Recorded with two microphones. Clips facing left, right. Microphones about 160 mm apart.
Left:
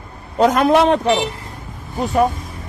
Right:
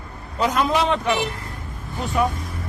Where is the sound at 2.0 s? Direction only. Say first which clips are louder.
Left 6 dB; 40° left (ahead or behind).